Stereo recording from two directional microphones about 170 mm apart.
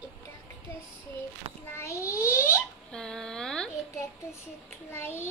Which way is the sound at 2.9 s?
5° left (ahead or behind).